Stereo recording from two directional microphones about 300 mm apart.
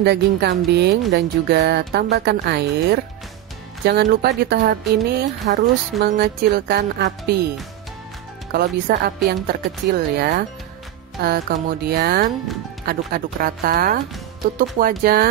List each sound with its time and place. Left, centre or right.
0.0 s speech: right
8.5 s speech: right